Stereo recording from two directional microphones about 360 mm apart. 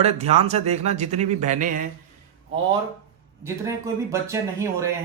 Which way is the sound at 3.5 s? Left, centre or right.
Centre.